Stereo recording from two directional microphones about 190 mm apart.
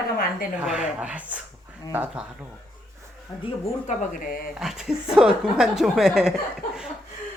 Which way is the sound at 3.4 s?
40° left (ahead or behind).